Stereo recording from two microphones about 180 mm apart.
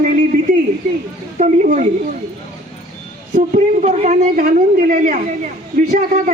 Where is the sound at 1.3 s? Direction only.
45° right (ahead or behind).